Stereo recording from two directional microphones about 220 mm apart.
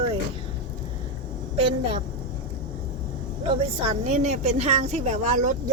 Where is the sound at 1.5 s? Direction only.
25° right (ahead or behind).